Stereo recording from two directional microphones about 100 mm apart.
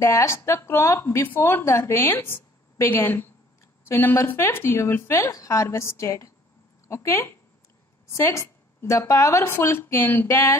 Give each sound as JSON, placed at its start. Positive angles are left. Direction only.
{"t": 0.0, "sound": "speech", "side_deg": 30}
{"t": 5.3, "sound": "speech", "side_deg": 35}